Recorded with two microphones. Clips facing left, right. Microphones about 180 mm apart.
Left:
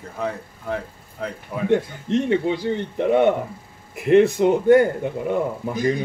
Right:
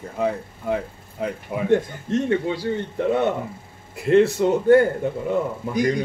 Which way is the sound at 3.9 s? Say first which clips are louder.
Left 1 dB; 20° left (ahead or behind).